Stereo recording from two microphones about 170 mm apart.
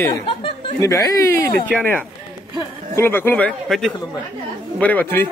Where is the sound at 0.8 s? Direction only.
20° left (ahead or behind).